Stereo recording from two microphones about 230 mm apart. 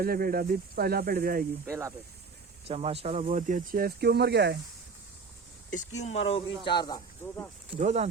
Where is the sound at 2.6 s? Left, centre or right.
Right.